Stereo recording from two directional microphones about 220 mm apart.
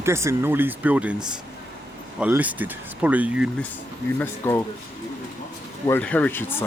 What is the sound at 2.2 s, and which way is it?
Speech, 5° right (ahead or behind).